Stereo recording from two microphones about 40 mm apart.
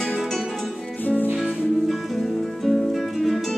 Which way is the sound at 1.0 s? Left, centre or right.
Left.